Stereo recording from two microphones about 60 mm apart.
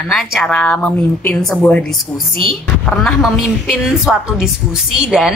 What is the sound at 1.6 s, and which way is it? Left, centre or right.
Speech, left.